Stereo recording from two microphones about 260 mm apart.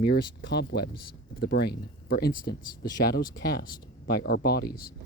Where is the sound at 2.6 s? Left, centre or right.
Left.